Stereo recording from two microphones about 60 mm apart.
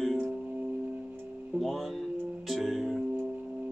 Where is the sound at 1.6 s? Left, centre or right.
Centre.